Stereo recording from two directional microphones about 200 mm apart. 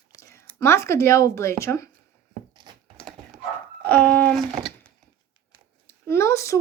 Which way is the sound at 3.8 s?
5° left (ahead or behind).